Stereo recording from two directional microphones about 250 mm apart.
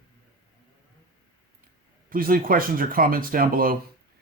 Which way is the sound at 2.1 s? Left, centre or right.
Right.